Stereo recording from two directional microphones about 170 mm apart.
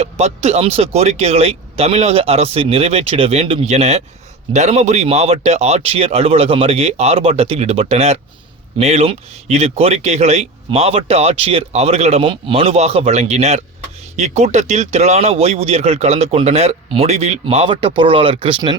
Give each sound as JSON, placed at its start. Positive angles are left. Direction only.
{"t": 0.0, "sound": "speech", "side_deg": -40}